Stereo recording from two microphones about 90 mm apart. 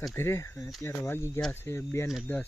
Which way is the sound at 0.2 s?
30° left (ahead or behind).